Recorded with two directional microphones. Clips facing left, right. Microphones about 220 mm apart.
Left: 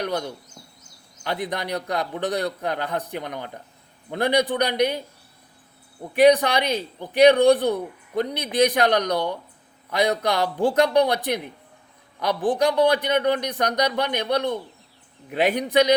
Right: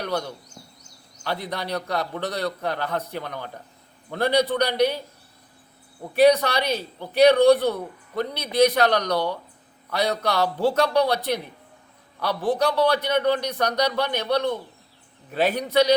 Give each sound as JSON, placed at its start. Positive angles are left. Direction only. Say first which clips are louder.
{"t": 0.0, "sound": "speech", "louder": "left 1 dB", "side_deg": 15}
{"t": 6.1, "sound": "speech", "louder": "left 1 dB", "side_deg": 15}